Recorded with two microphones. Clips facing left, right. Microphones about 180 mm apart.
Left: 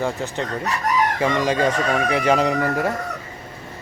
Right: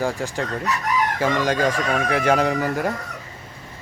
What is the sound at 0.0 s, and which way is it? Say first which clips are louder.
Speech: even; centre (ahead or behind).